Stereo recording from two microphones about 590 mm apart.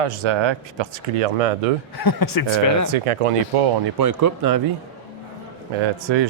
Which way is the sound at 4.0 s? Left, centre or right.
Right.